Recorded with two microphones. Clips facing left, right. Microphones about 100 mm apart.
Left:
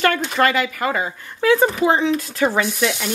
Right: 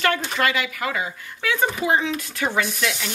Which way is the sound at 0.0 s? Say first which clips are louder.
Left 4 dB; 40° left (ahead or behind).